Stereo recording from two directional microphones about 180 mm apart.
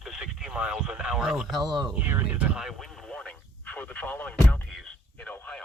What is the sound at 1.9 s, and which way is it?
Speech, 10° right (ahead or behind).